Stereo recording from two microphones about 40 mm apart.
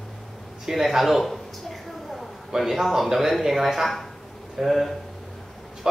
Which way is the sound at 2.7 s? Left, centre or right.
Centre.